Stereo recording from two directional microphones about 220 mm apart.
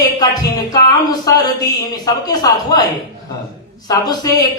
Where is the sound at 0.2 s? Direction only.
15° left (ahead or behind).